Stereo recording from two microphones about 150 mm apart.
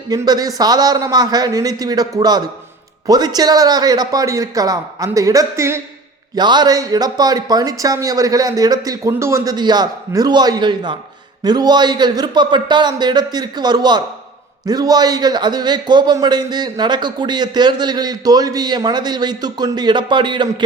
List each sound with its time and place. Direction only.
0.1 s a man's voice: 25° right (ahead or behind)
6.3 s a man's voice: 30° right (ahead or behind)